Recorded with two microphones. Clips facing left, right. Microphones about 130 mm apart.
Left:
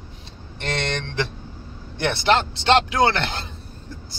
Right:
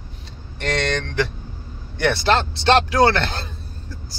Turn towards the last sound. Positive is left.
turn(degrees=20)  # may be behind; listen again after turning